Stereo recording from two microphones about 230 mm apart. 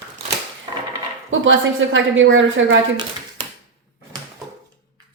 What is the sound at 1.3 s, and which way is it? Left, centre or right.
Speech, right.